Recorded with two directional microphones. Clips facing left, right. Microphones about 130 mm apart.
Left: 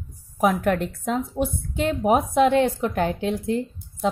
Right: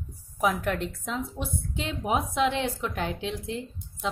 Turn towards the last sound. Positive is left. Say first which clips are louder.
# left 8 dB
turn(degrees=45)  # may be behind; listen again after turning